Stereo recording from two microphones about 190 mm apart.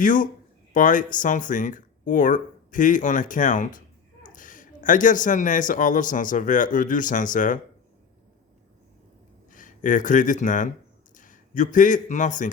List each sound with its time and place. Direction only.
0.0 s speech: 45° left (ahead or behind)
9.5 s a man's voice: 45° left (ahead or behind)